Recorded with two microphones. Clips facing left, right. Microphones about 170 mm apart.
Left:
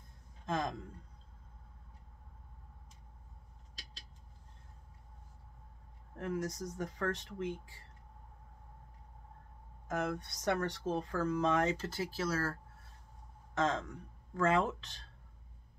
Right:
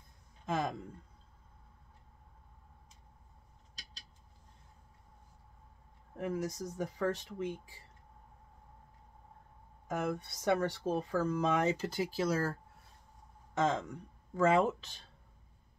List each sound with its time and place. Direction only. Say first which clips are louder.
0.5 s speech: right 1 dB; 10° right (ahead or behind)
6.1 s speech: right 1 dB; 10° right (ahead or behind)
9.8 s speech: right 1 dB; 5° right (ahead or behind)
13.6 s speech: right 2 dB; 10° right (ahead or behind)